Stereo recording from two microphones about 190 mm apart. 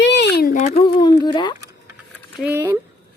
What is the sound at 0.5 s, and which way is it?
Speech, 35° left (ahead or behind).